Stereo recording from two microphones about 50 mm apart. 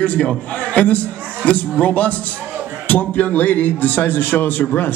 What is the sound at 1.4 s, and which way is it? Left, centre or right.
Speech, left.